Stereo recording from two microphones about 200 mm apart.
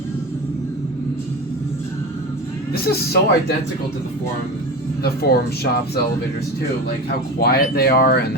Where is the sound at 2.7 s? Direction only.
50° left (ahead or behind).